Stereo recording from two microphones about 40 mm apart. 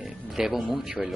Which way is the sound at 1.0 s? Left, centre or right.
Right.